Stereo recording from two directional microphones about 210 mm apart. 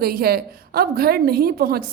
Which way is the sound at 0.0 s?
45° right (ahead or behind).